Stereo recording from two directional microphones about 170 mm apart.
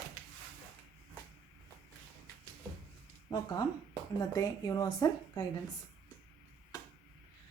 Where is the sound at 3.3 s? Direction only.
25° left (ahead or behind).